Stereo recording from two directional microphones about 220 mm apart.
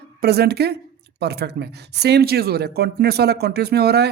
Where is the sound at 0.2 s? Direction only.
45° right (ahead or behind).